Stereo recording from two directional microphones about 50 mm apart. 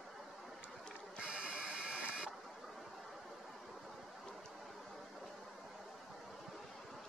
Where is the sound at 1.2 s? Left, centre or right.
Right.